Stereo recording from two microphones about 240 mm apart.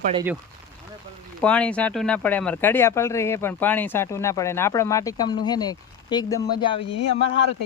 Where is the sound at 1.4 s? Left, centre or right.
Centre.